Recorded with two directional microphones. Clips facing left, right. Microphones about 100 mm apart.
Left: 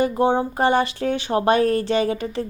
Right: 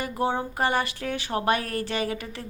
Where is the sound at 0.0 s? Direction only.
25° left (ahead or behind).